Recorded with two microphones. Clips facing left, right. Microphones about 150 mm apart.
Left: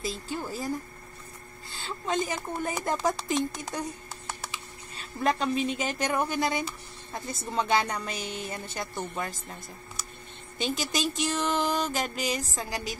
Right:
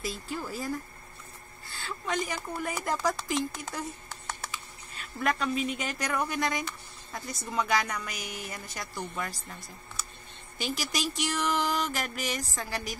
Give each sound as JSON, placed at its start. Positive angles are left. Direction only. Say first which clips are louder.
{"t": 0.4, "sound": "a woman's voice", "louder": "left 1 dB", "side_deg": 25}
{"t": 4.9, "sound": "a woman's voice", "louder": "left 3 dB", "side_deg": 25}
{"t": 10.6, "sound": "a woman's voice", "louder": "left 3 dB", "side_deg": 25}